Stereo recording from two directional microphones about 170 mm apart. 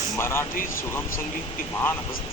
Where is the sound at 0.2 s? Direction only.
15° left (ahead or behind).